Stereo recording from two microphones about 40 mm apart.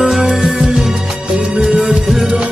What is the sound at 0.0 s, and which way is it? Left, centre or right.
Music, centre.